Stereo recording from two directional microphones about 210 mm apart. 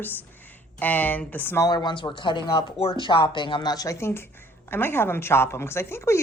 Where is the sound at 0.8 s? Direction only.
10° left (ahead or behind).